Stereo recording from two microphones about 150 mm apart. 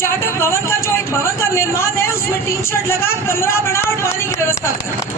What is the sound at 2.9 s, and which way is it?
A man's voice, 15° left (ahead or behind).